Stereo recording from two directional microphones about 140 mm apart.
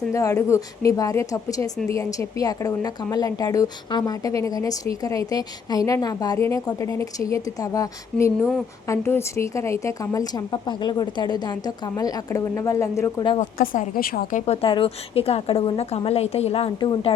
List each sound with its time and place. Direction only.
0.1 s speech: 20° left (ahead or behind)
13.6 s a woman's voice: 90° left
14.4 s a woman's voice: 45° left (ahead or behind)